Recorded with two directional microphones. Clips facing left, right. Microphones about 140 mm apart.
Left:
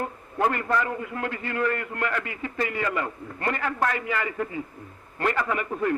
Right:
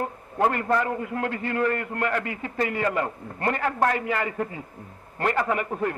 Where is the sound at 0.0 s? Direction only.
35° right (ahead or behind).